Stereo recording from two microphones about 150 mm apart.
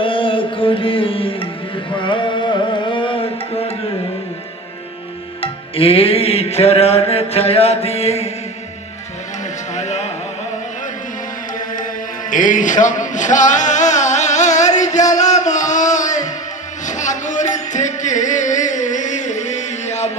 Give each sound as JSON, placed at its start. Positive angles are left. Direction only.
{"t": 0.0, "sound": "music", "side_deg": 35}
{"t": 2.0, "sound": "carnatic music", "side_deg": 35}
{"t": 5.4, "sound": "music", "side_deg": 40}
{"t": 9.7, "sound": "music", "side_deg": 50}
{"t": 12.3, "sound": "male singing", "side_deg": 60}
{"t": 16.8, "sound": "a sound", "side_deg": 55}